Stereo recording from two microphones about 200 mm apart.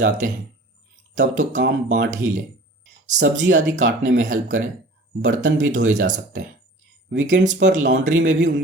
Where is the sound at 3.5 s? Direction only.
40° right (ahead or behind).